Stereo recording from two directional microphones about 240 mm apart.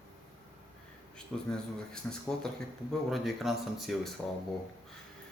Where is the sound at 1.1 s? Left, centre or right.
Centre.